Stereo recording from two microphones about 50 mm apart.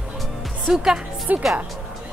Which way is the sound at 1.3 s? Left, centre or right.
Right.